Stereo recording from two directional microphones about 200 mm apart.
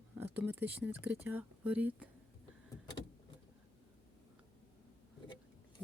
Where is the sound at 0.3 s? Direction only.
10° right (ahead or behind).